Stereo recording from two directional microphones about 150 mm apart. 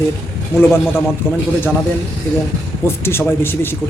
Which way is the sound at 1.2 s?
15° left (ahead or behind).